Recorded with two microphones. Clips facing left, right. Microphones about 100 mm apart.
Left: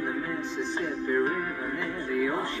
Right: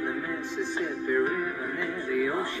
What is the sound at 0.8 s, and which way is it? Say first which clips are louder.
Music: even; 25° left (ahead or behind).